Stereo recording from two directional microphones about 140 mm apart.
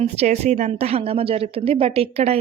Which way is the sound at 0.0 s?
50° right (ahead or behind).